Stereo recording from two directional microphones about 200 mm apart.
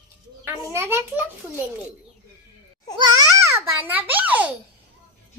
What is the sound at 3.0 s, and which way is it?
Babbling, 20° right (ahead or behind).